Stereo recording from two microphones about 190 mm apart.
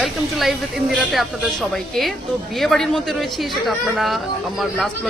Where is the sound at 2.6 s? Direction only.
Centre (ahead or behind).